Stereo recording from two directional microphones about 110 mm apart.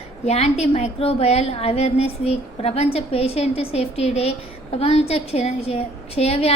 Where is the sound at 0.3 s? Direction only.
75° left (ahead or behind).